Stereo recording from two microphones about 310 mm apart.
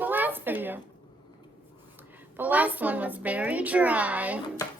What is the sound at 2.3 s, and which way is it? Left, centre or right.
A woman's voice, centre.